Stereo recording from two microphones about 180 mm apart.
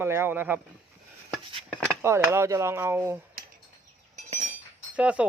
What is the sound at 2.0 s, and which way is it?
Speech, 15° right (ahead or behind).